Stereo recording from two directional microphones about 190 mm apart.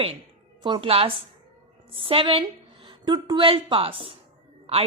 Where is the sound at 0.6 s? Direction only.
25° right (ahead or behind).